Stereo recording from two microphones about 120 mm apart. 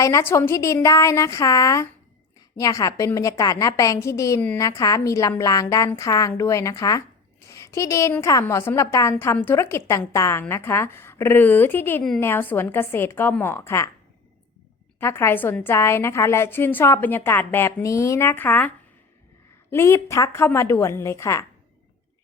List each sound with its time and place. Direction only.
0.0 s a woman's voice: 25° left (ahead or behind)
7.4 s a sound: 25° left (ahead or behind)
8.1 s a woman's voice: 25° left (ahead or behind)
14.9 s a woman's voice: 20° left (ahead or behind)
19.7 s a woman's voice: 25° left (ahead or behind)